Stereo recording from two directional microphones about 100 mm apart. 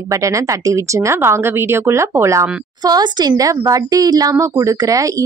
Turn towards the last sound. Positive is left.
turn(degrees=-35)  # may be behind; listen again after turning